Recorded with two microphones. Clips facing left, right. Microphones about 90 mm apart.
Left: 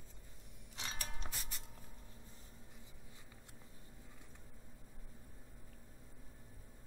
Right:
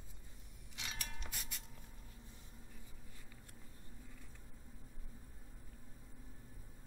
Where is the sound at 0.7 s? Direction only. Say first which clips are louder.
Left 2 dB; 35° left (ahead or behind).